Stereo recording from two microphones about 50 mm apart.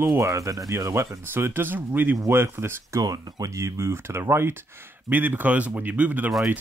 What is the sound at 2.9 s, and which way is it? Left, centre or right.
Speech, right.